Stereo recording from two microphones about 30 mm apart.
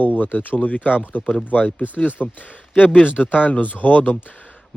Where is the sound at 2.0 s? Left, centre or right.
Left.